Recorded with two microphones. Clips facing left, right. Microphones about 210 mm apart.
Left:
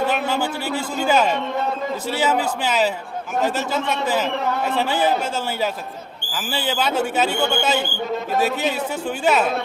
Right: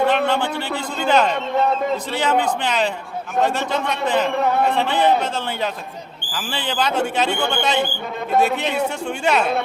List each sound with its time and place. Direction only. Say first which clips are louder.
0.0 s a man's voice: right 3 dB; 5° left (ahead or behind)
6.3 s a man's voice: left 1 dB; 5° left (ahead or behind)